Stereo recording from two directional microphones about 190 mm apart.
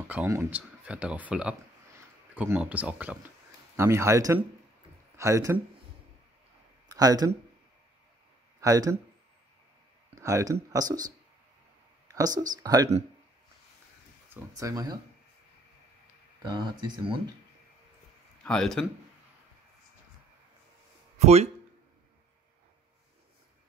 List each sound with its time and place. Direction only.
0.1 s speech: 10° right (ahead or behind)
6.9 s speech: 20° right (ahead or behind)
8.5 s speech: 20° right (ahead or behind)
10.2 s speech: 15° right (ahead or behind)
14.3 s speech: 15° right (ahead or behind)
16.4 s speech: 20° right (ahead or behind)
18.4 s a man's voice: 5° left (ahead or behind)
21.2 s speech: 35° right (ahead or behind)